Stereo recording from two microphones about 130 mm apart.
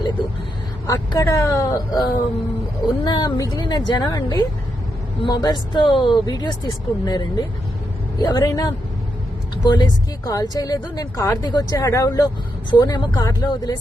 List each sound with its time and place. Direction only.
0.9 s speech: 25° left (ahead or behind)